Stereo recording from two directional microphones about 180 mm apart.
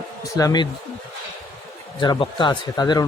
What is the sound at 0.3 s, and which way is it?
Speech, 20° left (ahead or behind).